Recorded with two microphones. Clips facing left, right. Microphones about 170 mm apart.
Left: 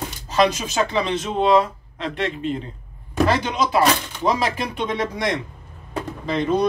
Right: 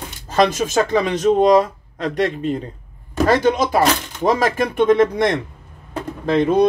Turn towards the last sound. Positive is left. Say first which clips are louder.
# right 5 dB
turn(degrees=-55)  # may be behind; listen again after turning